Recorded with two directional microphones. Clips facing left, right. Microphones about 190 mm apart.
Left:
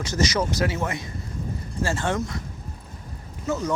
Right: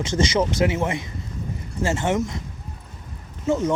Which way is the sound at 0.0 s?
25° right (ahead or behind).